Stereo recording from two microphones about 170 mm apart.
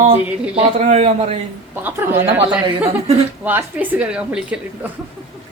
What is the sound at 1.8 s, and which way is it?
A woman's voice, 10° right (ahead or behind).